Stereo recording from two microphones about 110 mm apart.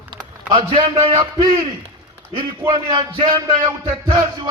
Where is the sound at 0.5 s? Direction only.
45° right (ahead or behind).